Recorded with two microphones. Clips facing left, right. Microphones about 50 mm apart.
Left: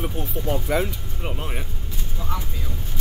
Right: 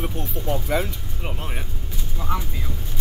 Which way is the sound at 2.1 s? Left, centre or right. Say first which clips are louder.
Right 3 dB; right.